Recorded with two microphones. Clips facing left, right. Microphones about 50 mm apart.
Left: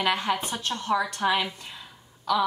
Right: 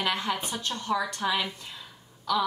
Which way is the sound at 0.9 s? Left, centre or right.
Centre.